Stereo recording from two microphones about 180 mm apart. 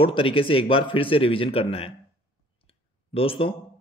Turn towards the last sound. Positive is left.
turn(degrees=30)  # may be behind; listen again after turning